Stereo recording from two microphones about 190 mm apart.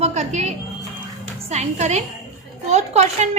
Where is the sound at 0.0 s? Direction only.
35° right (ahead or behind).